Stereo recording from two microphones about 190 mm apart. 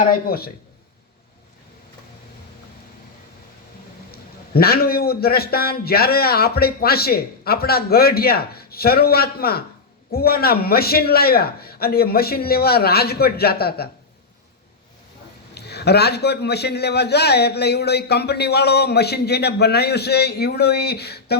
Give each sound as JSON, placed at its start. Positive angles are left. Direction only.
{"t": 0.1, "sound": "a man's voice", "side_deg": 55}
{"t": 4.1, "sound": "a man's voice", "side_deg": 55}
{"t": 15.5, "sound": "a man's voice", "side_deg": 60}